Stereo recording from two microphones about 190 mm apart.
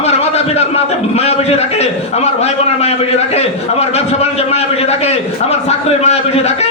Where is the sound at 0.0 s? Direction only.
35° left (ahead or behind).